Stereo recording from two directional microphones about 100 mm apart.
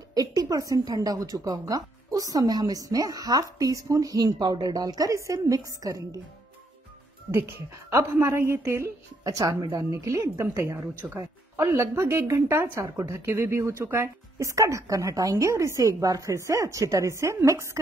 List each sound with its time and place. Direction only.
0.1 s speech: 40° right (ahead or behind)
7.2 s a woman's voice: 25° right (ahead or behind)